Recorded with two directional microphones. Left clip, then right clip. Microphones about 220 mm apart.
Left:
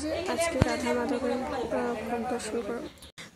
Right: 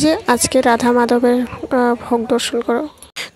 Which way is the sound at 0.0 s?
40° right (ahead or behind).